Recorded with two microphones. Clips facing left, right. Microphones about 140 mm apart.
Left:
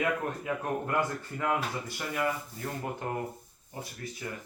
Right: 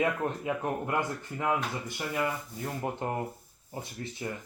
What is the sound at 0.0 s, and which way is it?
Speech, 25° right (ahead or behind).